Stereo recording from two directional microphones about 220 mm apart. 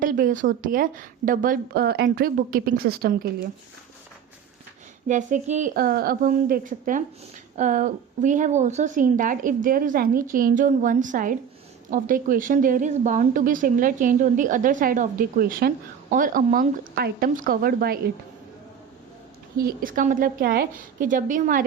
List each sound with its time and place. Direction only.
0.0 s a woman's voice: 40° right (ahead or behind)
5.0 s a woman's voice: 35° right (ahead or behind)
19.5 s a woman's voice: 40° right (ahead or behind)